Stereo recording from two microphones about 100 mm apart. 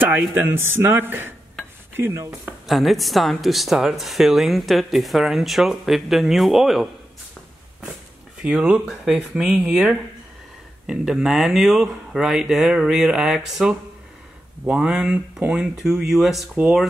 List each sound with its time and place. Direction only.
0.0 s a man's voice: 20° right (ahead or behind)
2.6 s speech: centre (ahead or behind)
8.4 s speech: 5° right (ahead or behind)